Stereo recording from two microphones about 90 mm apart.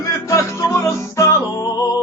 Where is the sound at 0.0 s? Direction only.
35° left (ahead or behind).